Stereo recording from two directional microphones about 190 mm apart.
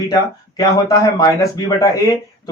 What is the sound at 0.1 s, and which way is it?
Speech, 20° left (ahead or behind).